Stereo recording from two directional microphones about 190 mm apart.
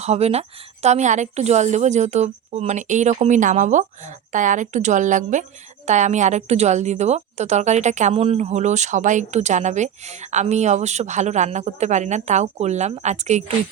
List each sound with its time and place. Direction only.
0.0 s a woman's voice: 35° right (ahead or behind)